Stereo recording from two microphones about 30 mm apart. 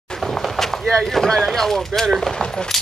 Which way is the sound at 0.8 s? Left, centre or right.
Centre.